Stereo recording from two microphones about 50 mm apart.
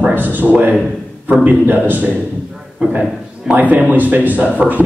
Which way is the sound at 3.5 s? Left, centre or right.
Right.